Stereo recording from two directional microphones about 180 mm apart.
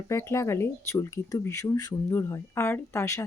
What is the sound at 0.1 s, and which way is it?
Speech, 15° left (ahead or behind).